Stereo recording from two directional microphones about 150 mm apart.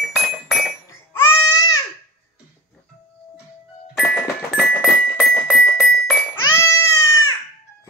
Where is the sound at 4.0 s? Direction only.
10° left (ahead or behind).